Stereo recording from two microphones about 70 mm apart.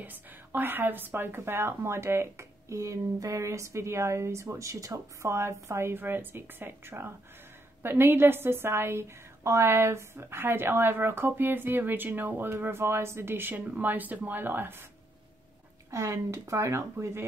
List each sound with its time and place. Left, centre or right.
0.0 s a woman's voice: right
15.9 s speech: right